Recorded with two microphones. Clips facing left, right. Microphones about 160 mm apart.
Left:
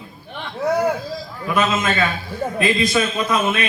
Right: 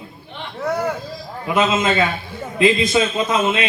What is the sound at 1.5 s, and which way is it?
A man's voice, 20° right (ahead or behind).